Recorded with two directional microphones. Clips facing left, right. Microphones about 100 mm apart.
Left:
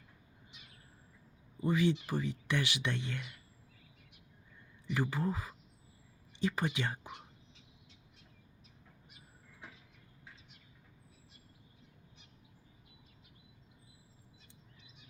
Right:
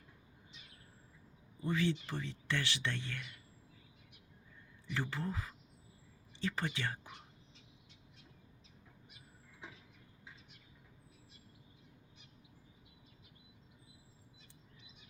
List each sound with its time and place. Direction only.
1.6 s speech: 15° left (ahead or behind)
4.9 s speech: 15° left (ahead or behind)